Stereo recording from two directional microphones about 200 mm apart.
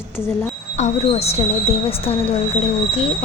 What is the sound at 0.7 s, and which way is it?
Speech, 35° left (ahead or behind).